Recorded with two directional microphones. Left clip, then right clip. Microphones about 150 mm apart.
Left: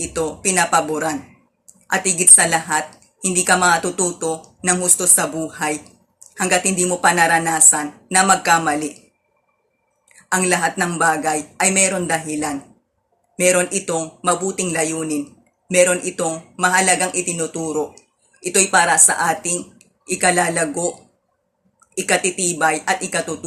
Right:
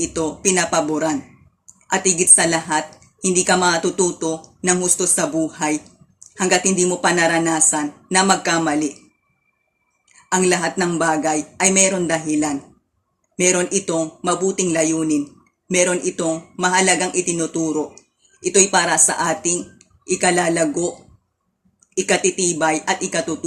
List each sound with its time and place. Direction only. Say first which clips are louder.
0.0 s a woman's voice: right 1 dB; 15° right (ahead or behind)
10.3 s a woman's voice: even; 15° right (ahead or behind)
21.9 s a woman's voice: right 1 dB; 15° right (ahead or behind)